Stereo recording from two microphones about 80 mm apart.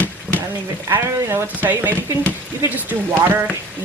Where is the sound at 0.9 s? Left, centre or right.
Right.